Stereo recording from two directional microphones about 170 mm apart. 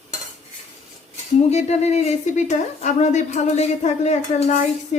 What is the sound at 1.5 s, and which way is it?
A woman's voice, 40° left (ahead or behind).